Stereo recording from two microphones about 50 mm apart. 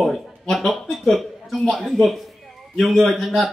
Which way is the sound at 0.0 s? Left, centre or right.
Centre.